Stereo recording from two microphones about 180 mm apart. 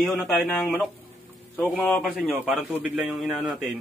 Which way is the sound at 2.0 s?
5° right (ahead or behind).